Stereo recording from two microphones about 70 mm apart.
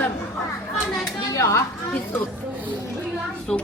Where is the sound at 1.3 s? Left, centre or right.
Left.